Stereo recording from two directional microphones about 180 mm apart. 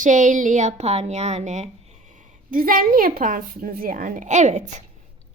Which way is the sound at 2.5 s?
50° right (ahead or behind).